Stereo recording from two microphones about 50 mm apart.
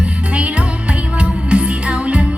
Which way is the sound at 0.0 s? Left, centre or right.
Right.